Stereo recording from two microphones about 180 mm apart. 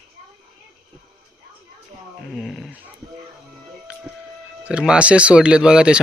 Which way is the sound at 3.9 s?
5° right (ahead or behind).